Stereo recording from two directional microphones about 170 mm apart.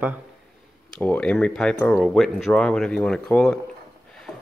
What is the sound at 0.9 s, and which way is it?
Speech, 5° left (ahead or behind).